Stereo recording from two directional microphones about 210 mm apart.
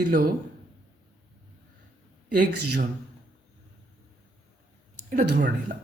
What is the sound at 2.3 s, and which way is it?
Speech, 40° right (ahead or behind).